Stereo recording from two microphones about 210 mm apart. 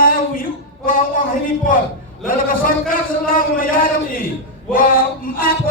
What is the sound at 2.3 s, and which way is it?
A man's voice, 40° left (ahead or behind).